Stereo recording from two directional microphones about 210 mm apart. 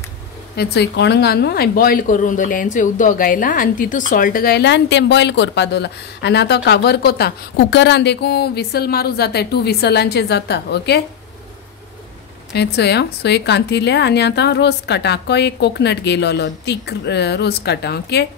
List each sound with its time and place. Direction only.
0.6 s a woman's voice: 55° left (ahead or behind)
12.5 s a woman's voice: 50° left (ahead or behind)